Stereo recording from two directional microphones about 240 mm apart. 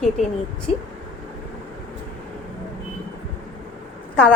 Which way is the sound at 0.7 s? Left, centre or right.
Left.